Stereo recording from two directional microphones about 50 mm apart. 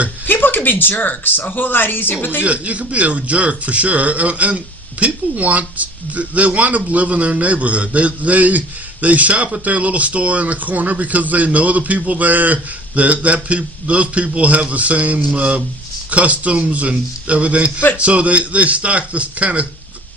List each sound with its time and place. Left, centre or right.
0.3 s speech: left
2.4 s a man's voice: right